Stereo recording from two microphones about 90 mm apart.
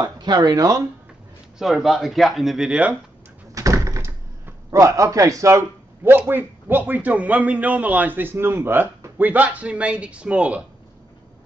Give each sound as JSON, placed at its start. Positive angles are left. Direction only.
{"t": 0.0, "sound": "speech", "side_deg": -50}
{"t": 1.6, "sound": "speech", "side_deg": 0}
{"t": 3.5, "sound": "door", "side_deg": -40}
{"t": 4.6, "sound": "a man's voice", "side_deg": -35}
{"t": 6.0, "sound": "a man's voice", "side_deg": -25}